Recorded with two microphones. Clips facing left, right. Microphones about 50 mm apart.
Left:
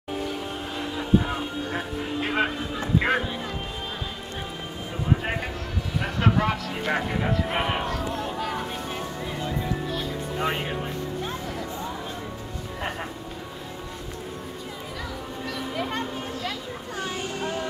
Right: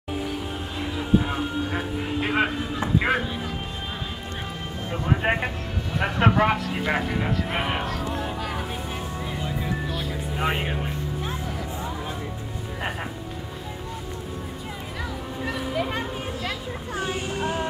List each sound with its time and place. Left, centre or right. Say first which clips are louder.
0.2 s music: even; centre
3.0 s a sound: even; centre
5.1 s speech: right 4 dB; right
6.8 s speech: right 1 dB; centre
8.1 s vehicle: even; centre
9.4 s music: left 1 dB; centre
10.3 s vehicle: right 1 dB; centre
15.7 s a sound: even; centre; by 17.6 s right